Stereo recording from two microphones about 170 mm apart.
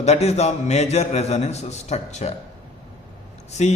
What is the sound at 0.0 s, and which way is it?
A man's voice, 40° left (ahead or behind).